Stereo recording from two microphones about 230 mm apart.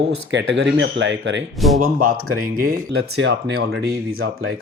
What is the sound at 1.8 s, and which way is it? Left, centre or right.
Speech, right.